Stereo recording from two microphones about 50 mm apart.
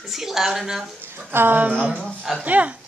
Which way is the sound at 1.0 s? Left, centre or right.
Right.